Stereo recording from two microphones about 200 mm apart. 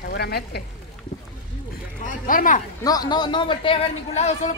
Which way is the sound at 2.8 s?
20° left (ahead or behind).